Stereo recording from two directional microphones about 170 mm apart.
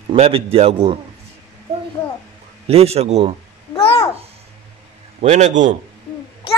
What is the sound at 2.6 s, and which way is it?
Speech, 35° right (ahead or behind).